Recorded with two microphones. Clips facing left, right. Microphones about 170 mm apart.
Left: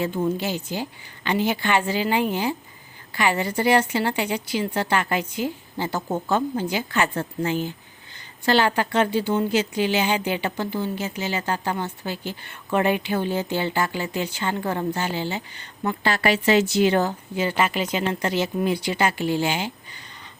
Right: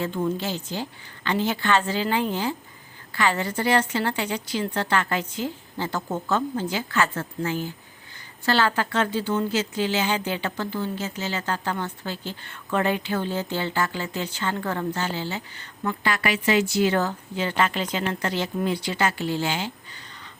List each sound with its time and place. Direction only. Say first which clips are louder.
0.0 s a woman's voice: left 2 dB; 10° left (ahead or behind)